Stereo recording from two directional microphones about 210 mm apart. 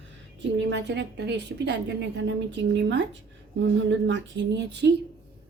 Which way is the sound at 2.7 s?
55° right (ahead or behind).